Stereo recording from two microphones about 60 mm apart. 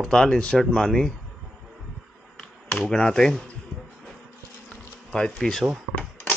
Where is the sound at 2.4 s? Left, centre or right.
Centre.